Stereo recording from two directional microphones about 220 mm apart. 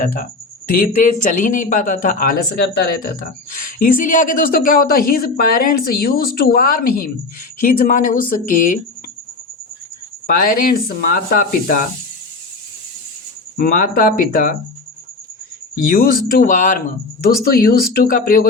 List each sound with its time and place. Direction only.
0.0 s speech: 35° left (ahead or behind)
10.2 s speech: 40° left (ahead or behind)
13.6 s speech: 40° left (ahead or behind)
15.8 s speech: 40° left (ahead or behind)